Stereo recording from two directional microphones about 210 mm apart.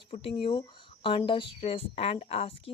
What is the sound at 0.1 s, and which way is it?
Speech, 25° left (ahead or behind).